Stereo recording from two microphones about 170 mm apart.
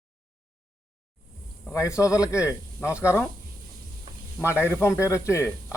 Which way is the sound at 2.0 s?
20° left (ahead or behind).